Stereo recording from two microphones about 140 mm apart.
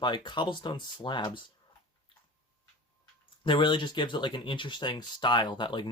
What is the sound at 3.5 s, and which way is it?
Speech, 35° left (ahead or behind).